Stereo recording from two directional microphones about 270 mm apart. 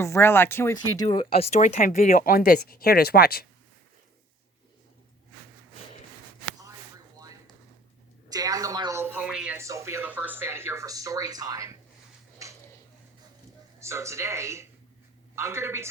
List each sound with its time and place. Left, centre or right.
0.0 s speech: centre; by 3.4 s left
7.2 s a sound: centre
8.3 s a woman's voice: centre
13.7 s speech: centre